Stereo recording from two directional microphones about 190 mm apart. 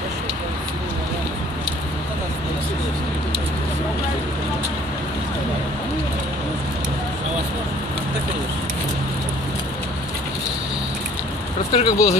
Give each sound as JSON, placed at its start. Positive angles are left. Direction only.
{"t": 11.7, "sound": "speech", "side_deg": 25}